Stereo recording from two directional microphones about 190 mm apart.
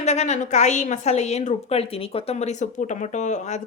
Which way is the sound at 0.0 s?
35° left (ahead or behind).